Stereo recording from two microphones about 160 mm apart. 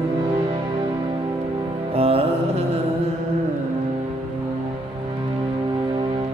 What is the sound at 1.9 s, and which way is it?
Music, 35° right (ahead or behind).